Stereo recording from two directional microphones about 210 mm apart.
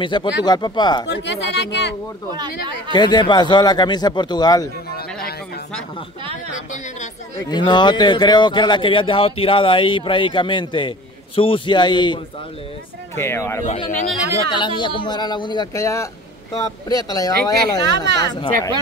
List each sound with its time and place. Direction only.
0.0 s speech: 20° left (ahead or behind)
1.0 s speech: 55° left (ahead or behind)
2.9 s speech: 20° left (ahead or behind)
7.3 s speech: 20° left (ahead or behind)
13.8 s speech: 35° left (ahead or behind)
14.5 s speech: 20° left (ahead or behind)